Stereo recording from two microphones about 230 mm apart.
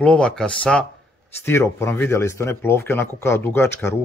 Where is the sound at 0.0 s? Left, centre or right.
Centre.